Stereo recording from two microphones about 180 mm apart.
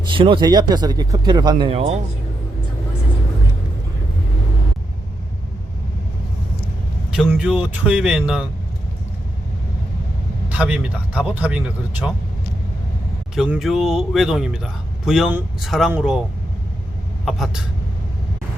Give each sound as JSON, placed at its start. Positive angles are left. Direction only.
{"t": 0.1, "sound": "speech", "side_deg": -30}
{"t": 7.1, "sound": "speech", "side_deg": -5}
{"t": 10.5, "sound": "speech", "side_deg": -10}
{"t": 13.3, "sound": "speech", "side_deg": -5}
{"t": 17.2, "sound": "speech", "side_deg": 0}